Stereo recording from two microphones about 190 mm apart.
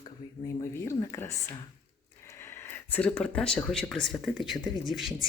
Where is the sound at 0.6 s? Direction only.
15° left (ahead or behind).